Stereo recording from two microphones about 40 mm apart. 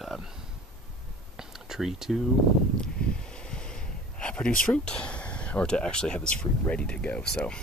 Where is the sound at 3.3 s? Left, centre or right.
Left.